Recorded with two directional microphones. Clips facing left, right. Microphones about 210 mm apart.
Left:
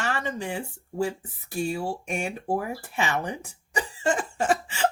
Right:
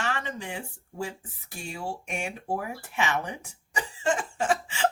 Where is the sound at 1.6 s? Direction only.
35° left (ahead or behind).